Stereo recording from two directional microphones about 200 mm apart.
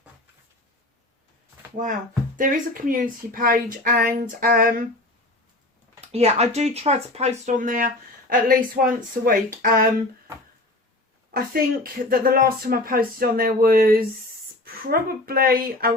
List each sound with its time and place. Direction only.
1.8 s speech: 40° right (ahead or behind)
6.0 s speech: 30° right (ahead or behind)
11.5 s speech: 45° right (ahead or behind)